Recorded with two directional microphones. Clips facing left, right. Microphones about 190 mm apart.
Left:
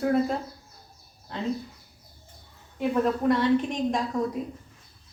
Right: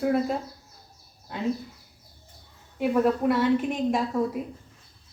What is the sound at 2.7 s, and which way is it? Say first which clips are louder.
A woman's voice: right 2 dB; 5° right (ahead or behind).